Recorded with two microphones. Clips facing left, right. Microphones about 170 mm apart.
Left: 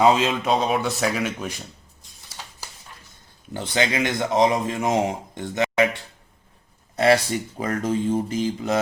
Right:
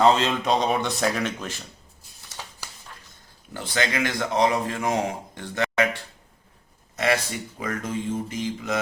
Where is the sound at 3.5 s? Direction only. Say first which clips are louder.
Left 3 dB; 20° left (ahead or behind).